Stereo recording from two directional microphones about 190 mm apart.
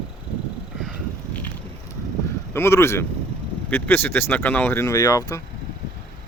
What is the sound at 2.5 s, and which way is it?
Speech, 15° left (ahead or behind).